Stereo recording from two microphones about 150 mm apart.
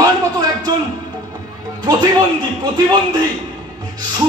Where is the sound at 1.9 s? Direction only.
30° right (ahead or behind).